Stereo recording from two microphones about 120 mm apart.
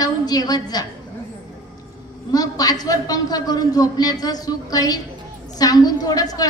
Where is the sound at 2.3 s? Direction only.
30° left (ahead or behind).